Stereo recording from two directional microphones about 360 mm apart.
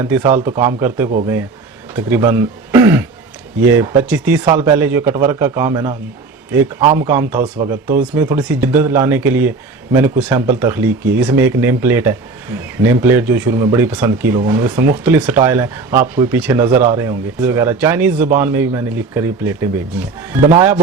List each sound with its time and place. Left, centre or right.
0.0 s a man's voice: centre
16.7 s speech: right
17.0 s a man's voice: centre